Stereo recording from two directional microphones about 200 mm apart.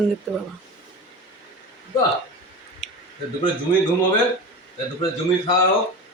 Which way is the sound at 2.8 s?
35° left (ahead or behind).